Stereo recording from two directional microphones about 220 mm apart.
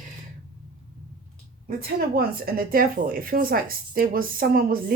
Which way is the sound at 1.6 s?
40° right (ahead or behind).